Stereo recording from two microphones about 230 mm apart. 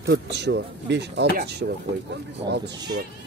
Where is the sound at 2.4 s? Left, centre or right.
Centre.